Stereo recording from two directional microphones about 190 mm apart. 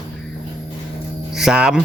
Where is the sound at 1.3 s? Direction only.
5° right (ahead or behind).